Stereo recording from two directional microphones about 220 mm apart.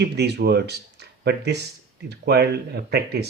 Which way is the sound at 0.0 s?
50° right (ahead or behind).